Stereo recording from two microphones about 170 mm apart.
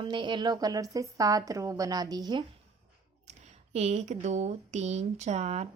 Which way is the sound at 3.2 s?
40° right (ahead or behind).